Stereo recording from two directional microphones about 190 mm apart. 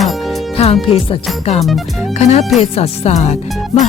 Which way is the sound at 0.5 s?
30° left (ahead or behind).